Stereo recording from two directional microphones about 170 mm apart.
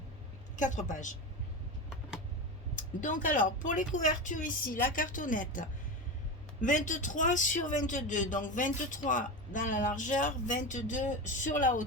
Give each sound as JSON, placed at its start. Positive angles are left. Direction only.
{"t": 0.5, "sound": "a man's voice", "side_deg": 50}
{"t": 2.7, "sound": "a man's voice", "side_deg": 50}